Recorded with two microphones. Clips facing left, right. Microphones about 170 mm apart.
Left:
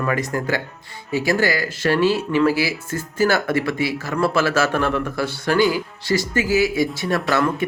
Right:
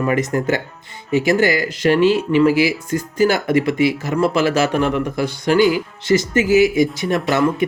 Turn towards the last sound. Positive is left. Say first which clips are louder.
# right 2 dB
turn(degrees=-20)  # may be behind; listen again after turning